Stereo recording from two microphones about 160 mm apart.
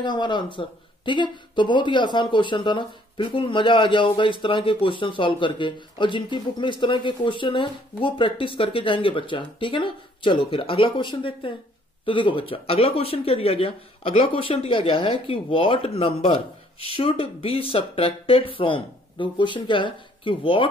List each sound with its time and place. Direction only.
0.0 s speech: 30° left (ahead or behind)